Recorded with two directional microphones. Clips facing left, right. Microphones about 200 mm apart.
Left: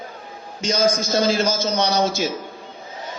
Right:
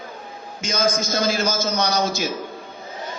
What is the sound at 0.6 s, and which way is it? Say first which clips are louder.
A man's voice: left 3 dB; 35° left (ahead or behind).